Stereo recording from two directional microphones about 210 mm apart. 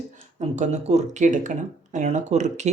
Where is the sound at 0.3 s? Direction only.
35° right (ahead or behind).